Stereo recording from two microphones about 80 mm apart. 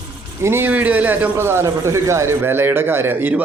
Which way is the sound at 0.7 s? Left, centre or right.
Right.